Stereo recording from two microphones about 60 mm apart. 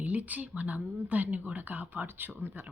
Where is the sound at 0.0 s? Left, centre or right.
Right.